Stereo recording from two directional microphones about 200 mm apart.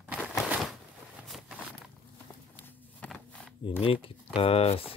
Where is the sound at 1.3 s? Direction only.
5° right (ahead or behind).